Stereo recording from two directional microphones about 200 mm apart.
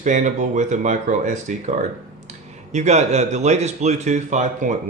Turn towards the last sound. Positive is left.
turn(degrees=-35)  # may be behind; listen again after turning